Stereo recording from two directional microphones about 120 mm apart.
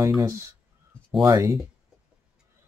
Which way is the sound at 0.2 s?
25° right (ahead or behind).